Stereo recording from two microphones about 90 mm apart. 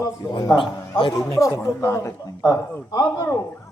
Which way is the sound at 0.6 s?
55° left (ahead or behind).